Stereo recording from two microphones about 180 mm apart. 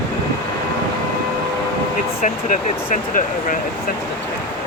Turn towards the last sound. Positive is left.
turn(degrees=45)  # may be behind; listen again after turning